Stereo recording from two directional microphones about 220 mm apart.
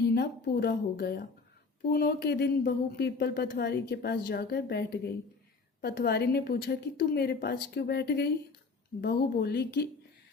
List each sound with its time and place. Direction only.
0.0 s speech: 45° left (ahead or behind)